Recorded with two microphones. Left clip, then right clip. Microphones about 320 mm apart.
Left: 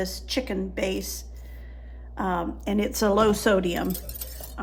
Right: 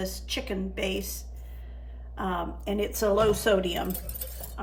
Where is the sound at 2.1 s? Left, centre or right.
Centre.